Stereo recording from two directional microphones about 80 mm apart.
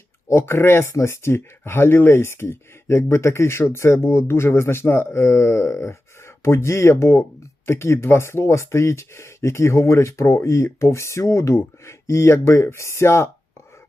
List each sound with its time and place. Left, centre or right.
0.3 s speech: left